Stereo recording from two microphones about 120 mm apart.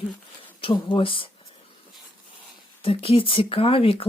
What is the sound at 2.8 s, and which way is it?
Speech, 50° left (ahead or behind).